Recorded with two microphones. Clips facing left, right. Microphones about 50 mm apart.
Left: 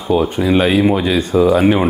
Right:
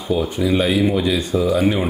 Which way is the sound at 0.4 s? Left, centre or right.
Left.